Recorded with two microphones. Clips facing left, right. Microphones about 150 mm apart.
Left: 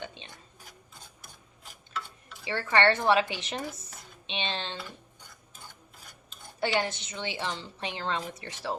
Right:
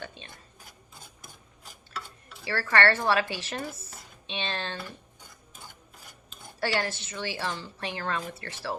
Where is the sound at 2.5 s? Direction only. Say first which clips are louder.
Even; 20° left (ahead or behind).